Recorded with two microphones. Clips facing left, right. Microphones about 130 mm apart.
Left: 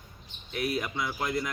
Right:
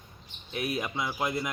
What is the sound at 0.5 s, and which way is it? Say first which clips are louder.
Speech: left 1 dB; 20° right (ahead or behind).